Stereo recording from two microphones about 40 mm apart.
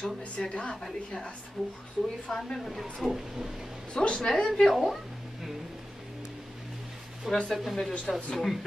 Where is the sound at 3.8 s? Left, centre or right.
Left.